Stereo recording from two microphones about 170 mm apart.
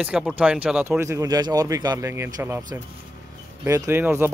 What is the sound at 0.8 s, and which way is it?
A man's voice, 15° right (ahead or behind).